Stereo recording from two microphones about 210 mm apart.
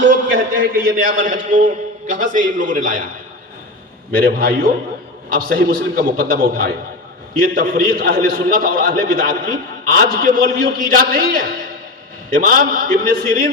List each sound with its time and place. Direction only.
0.6 s a man's voice: 40° right (ahead or behind)
4.1 s a man's voice: 45° right (ahead or behind)